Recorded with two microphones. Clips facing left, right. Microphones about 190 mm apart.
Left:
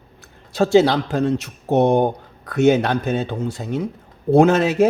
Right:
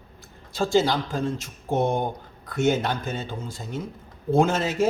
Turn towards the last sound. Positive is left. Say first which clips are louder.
# left 7 dB
turn(degrees=65)  # may be behind; listen again after turning